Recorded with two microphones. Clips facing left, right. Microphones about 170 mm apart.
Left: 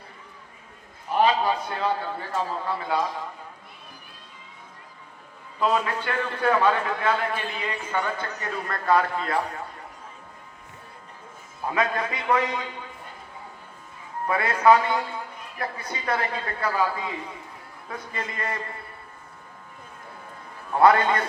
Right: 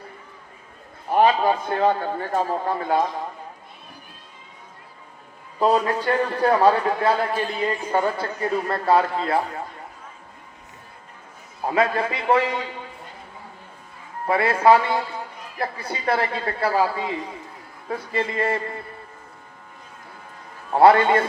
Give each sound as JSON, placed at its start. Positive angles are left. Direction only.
{"t": 1.1, "sound": "a man's voice", "side_deg": -50}
{"t": 5.5, "sound": "a man's voice", "side_deg": -35}
{"t": 11.6, "sound": "a man's voice", "side_deg": -30}
{"t": 14.3, "sound": "a man's voice", "side_deg": -30}
{"t": 20.7, "sound": "a man's voice", "side_deg": -30}